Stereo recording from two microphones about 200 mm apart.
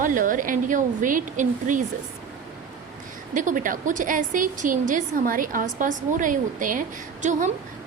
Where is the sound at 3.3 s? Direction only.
40° right (ahead or behind).